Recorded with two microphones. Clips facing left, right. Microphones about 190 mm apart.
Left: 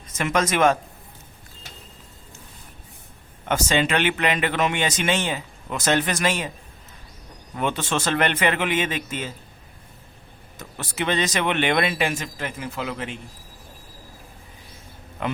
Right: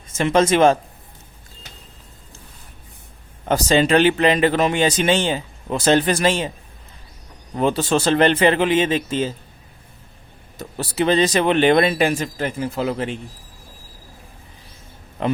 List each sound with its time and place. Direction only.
0.1 s speech: 30° right (ahead or behind)
3.4 s speech: 35° right (ahead or behind)
7.5 s speech: 35° right (ahead or behind)
10.6 s speech: 35° right (ahead or behind)
15.2 s speech: 35° right (ahead or behind)